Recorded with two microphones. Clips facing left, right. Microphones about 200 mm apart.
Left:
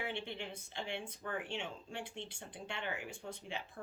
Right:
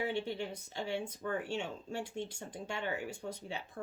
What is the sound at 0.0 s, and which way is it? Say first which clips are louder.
Speech: right 6 dB; 40° right (ahead or behind).